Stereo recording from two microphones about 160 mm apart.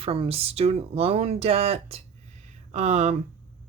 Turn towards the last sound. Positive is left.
turn(degrees=-45)  # may be behind; listen again after turning